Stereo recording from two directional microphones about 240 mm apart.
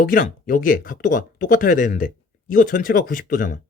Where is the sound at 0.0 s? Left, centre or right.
Left.